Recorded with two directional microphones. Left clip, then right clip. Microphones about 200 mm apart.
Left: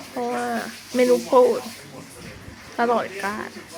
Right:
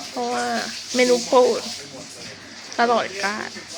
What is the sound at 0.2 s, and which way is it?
Speech, centre (ahead or behind).